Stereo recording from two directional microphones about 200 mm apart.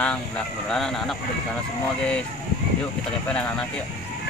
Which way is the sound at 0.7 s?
Centre (ahead or behind).